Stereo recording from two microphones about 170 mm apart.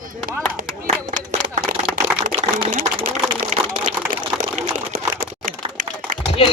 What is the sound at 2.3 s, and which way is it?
Typing, 35° right (ahead or behind).